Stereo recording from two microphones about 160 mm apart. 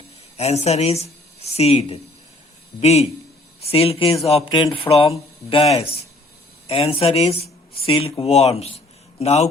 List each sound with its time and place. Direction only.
0.3 s speech: 40° left (ahead or behind)